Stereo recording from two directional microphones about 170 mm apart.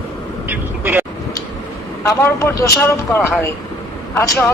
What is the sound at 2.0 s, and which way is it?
A woman's voice, 15° left (ahead or behind).